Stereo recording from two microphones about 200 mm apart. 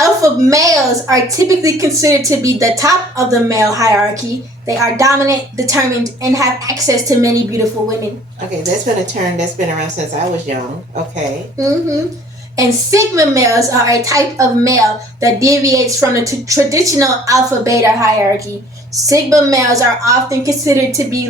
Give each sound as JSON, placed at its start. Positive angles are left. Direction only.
{"t": 0.0, "sound": "a woman's voice", "side_deg": -15}
{"t": 4.9, "sound": "a woman's voice", "side_deg": -15}
{"t": 12.5, "sound": "a woman's voice", "side_deg": -15}